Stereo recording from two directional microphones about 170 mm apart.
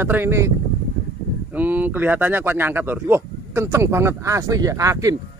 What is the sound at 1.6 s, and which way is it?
Speech, 10° right (ahead or behind).